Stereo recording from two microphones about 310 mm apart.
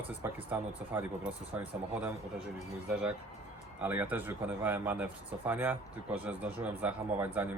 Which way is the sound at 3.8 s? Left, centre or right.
Centre.